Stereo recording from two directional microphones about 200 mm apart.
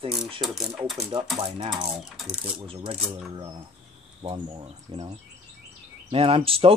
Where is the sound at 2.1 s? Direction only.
5° right (ahead or behind).